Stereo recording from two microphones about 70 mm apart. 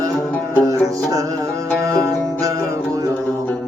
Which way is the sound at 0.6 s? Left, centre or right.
Right.